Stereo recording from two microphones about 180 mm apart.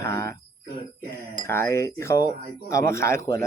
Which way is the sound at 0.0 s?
15° left (ahead or behind).